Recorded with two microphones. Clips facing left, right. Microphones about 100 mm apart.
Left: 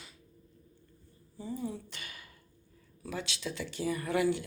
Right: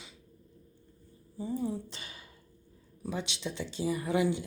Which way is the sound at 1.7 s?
30° right (ahead or behind).